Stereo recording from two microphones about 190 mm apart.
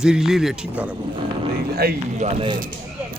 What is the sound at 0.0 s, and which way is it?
Speech, 5° right (ahead or behind).